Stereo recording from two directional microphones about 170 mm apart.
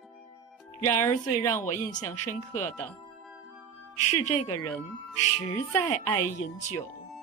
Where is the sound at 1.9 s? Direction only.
45° left (ahead or behind).